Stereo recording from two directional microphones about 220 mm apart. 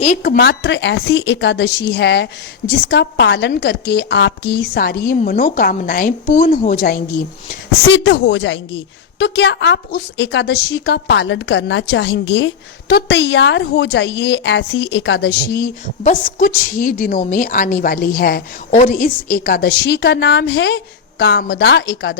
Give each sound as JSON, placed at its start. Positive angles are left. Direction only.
{"t": 0.2, "sound": "a woman's voice", "side_deg": 45}
{"t": 7.9, "sound": "a woman's voice", "side_deg": 55}